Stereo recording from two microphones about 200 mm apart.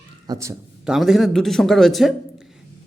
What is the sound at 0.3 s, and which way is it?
Speech, 20° right (ahead or behind).